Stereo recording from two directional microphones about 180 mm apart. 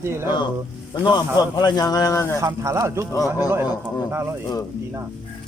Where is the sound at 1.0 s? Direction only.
25° left (ahead or behind).